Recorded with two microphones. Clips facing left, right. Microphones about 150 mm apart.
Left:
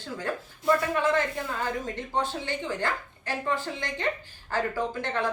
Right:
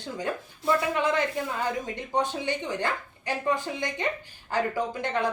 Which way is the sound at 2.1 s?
15° right (ahead or behind).